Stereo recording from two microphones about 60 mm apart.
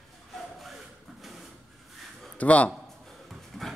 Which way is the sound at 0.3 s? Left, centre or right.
Centre.